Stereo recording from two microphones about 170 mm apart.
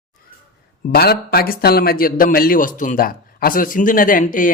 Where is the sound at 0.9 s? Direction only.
65° left (ahead or behind).